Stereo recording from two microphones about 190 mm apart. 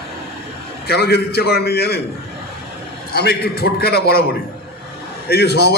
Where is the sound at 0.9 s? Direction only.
60° left (ahead or behind).